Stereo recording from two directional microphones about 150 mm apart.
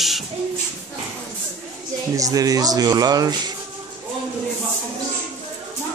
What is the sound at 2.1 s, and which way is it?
Speech, 25° right (ahead or behind).